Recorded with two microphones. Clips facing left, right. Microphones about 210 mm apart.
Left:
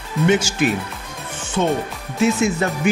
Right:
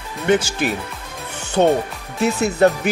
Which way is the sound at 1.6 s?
45° right (ahead or behind).